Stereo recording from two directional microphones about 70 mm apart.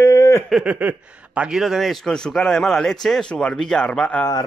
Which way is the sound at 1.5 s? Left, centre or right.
Centre.